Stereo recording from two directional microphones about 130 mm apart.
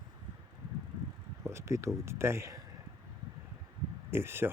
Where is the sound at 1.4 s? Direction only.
20° right (ahead or behind).